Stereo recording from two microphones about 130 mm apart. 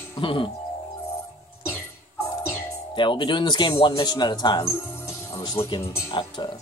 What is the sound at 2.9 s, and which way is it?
Speech, 35° left (ahead or behind).